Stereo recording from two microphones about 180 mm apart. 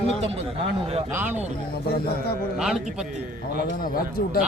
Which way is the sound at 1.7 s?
60° left (ahead or behind).